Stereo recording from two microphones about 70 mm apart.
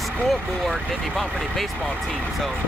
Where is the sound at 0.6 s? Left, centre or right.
Centre.